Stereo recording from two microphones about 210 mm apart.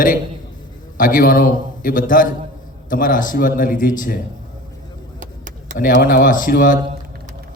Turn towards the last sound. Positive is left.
turn(degrees=40)  # may be behind; listen again after turning